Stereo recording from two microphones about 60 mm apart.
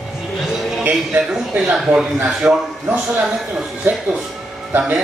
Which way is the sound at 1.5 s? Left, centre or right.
Right.